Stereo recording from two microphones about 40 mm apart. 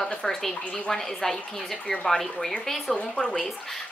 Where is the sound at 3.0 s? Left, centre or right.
Left.